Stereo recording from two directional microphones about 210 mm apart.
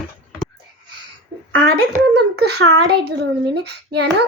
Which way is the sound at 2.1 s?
50° right (ahead or behind).